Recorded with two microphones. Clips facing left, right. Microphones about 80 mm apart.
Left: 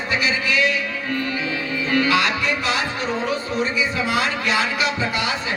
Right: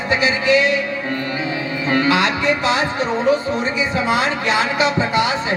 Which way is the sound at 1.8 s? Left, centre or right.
Right.